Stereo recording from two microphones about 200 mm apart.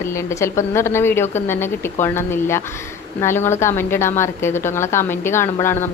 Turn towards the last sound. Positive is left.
turn(degrees=10)  # may be behind; listen again after turning